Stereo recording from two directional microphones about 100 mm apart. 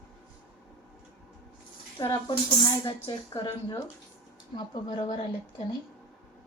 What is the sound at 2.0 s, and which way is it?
Speech, 50° left (ahead or behind).